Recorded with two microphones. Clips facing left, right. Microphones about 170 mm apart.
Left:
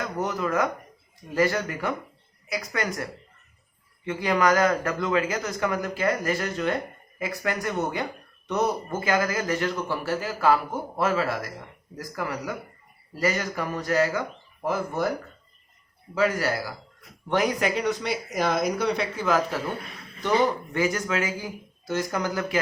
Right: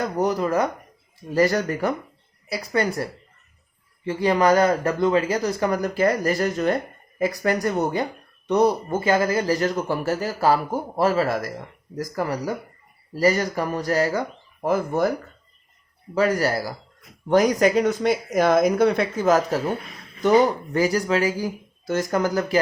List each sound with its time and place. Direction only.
0.0 s a man's voice: 35° right (ahead or behind)
14.6 s speech: 45° right (ahead or behind)
16.1 s a man's voice: 40° right (ahead or behind)
20.7 s a man's voice: 35° right (ahead or behind)
21.8 s speech: 45° right (ahead or behind)